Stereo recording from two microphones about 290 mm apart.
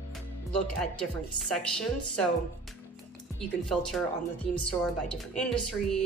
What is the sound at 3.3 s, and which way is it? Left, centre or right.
A woman's voice, centre.